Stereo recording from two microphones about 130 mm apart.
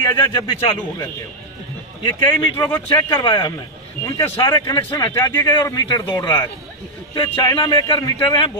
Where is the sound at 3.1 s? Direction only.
35° left (ahead or behind).